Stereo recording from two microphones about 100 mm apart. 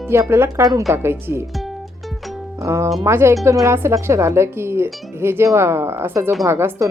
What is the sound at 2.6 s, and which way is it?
Speech, 30° right (ahead or behind).